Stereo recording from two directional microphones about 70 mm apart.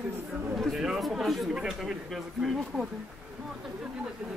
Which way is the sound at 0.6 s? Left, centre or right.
Centre.